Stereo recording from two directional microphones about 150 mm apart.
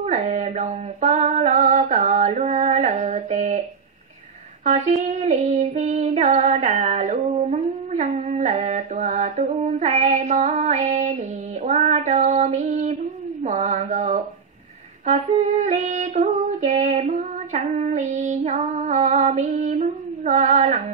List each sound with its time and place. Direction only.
0.0 s female singing: 50° right (ahead or behind)
4.6 s female singing: 55° right (ahead or behind)
13.4 s mantra: 50° right (ahead or behind)
15.6 s female singing: 50° right (ahead or behind)